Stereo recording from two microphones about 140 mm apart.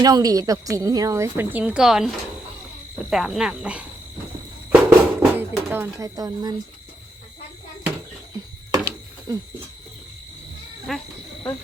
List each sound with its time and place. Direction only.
0.0 s a woman's voice: 25° right (ahead or behind); by 3.8 s 5° right (ahead or behind)
4.7 s music: 15° right (ahead or behind)
5.6 s speech: 15° right (ahead or behind)
6.1 s a woman's voice: 30° right (ahead or behind)
9.3 s a woman's voice: 25° right (ahead or behind)
10.9 s speech: centre (ahead or behind)